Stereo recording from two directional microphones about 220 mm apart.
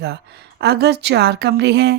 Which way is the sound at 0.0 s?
50° right (ahead or behind).